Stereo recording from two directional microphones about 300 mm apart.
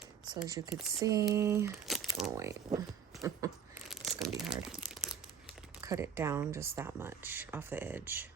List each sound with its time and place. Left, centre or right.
0.4 s speech: centre
3.2 s a sound: centre
4.4 s speech: centre